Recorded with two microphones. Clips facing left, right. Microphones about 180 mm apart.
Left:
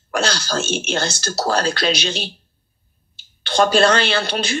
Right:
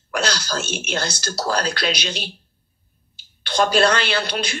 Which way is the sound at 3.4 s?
25° left (ahead or behind).